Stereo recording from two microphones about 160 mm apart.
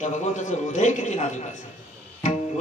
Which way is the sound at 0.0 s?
50° left (ahead or behind).